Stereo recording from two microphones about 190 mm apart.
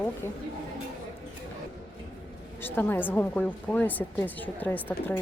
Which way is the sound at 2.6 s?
10° left (ahead or behind).